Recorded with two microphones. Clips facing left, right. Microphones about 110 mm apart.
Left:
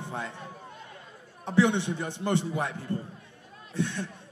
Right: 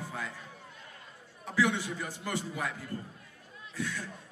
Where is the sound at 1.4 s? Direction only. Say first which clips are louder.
Left 5 dB; 25° left (ahead or behind).